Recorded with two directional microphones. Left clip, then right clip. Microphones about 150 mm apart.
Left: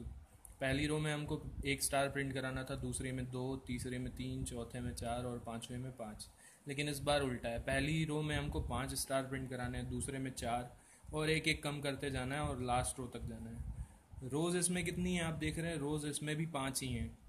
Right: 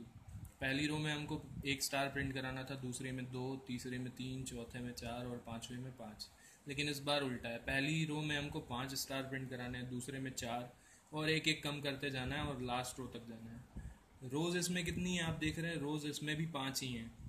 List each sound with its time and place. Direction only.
0.6 s a man's voice: 60° left (ahead or behind)
6.7 s a man's voice: 65° left (ahead or behind)
14.3 s a man's voice: 60° left (ahead or behind)